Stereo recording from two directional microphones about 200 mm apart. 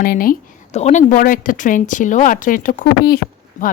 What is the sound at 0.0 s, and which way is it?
Speech, 45° left (ahead or behind).